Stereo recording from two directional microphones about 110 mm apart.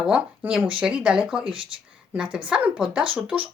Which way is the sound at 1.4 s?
50° right (ahead or behind).